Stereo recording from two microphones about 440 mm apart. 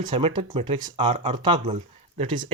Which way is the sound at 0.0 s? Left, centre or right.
Centre.